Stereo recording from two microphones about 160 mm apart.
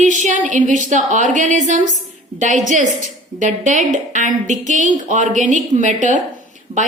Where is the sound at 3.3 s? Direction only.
50° right (ahead or behind).